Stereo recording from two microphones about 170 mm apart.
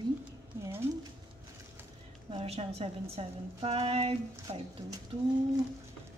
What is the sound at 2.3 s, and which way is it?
A woman's voice, 35° right (ahead or behind).